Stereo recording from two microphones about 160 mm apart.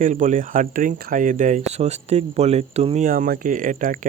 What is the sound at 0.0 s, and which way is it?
Speech, 50° right (ahead or behind).